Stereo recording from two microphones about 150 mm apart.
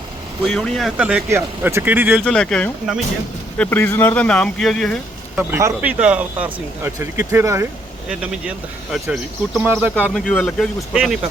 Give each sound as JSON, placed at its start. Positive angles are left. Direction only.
{"t": 0.4, "sound": "speech", "side_deg": 0}
{"t": 2.2, "sound": "speech", "side_deg": 5}
{"t": 3.6, "sound": "speech", "side_deg": 15}
{"t": 5.4, "sound": "speech", "side_deg": -15}
{"t": 8.2, "sound": "speech", "side_deg": -5}
{"t": 10.2, "sound": "speech", "side_deg": 5}